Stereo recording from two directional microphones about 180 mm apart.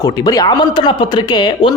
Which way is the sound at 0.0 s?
20° left (ahead or behind).